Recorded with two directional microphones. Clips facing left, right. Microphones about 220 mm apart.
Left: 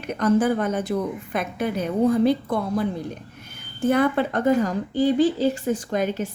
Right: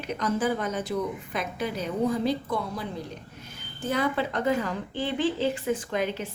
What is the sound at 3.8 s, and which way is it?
A woman's voice, 55° left (ahead or behind).